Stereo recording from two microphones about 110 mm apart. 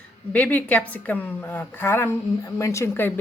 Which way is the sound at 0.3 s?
10° left (ahead or behind).